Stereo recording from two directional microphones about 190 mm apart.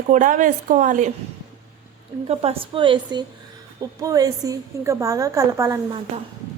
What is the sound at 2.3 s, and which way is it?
A woman's voice, 30° right (ahead or behind).